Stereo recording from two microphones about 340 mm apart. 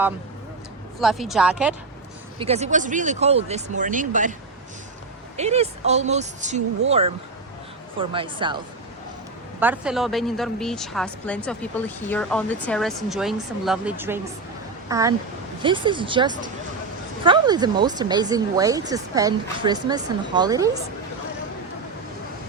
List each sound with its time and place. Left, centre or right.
0.9 s a woman's voice: centre
2.4 s speech: centre
5.4 s speech: centre
7.9 s a woman's voice: centre